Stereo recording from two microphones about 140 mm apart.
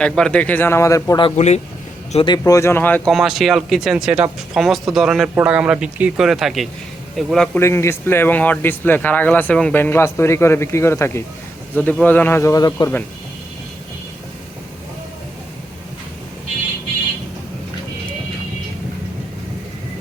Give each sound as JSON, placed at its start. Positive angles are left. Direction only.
{"t": 0.0, "sound": "speech", "side_deg": 5}
{"t": 1.4, "sound": "speech", "side_deg": 55}
{"t": 2.1, "sound": "speech", "side_deg": 35}
{"t": 2.4, "sound": "speech", "side_deg": 20}
{"t": 3.1, "sound": "speech", "side_deg": 0}
{"t": 7.6, "sound": "speech", "side_deg": 20}